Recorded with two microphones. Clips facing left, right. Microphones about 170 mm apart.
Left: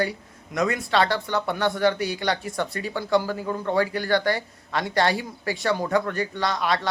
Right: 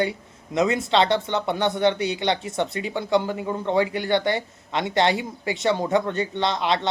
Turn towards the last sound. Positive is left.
turn(degrees=-25)  # may be behind; listen again after turning